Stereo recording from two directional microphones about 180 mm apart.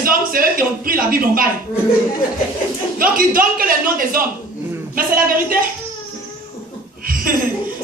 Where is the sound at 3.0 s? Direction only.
50° right (ahead or behind).